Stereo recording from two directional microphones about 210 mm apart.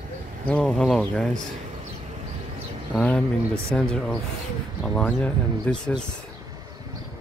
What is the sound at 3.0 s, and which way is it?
Speech, 5° left (ahead or behind).